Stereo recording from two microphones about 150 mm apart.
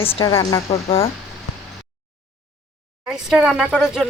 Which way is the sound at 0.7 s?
40° left (ahead or behind).